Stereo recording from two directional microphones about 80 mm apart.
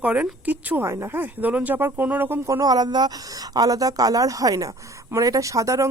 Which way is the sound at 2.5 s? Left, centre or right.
Right.